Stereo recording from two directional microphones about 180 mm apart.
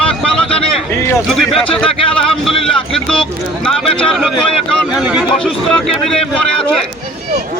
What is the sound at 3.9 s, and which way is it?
Speech, 30° left (ahead or behind).